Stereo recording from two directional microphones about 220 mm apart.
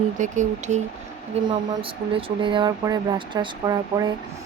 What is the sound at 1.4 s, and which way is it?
Speech, 25° right (ahead or behind).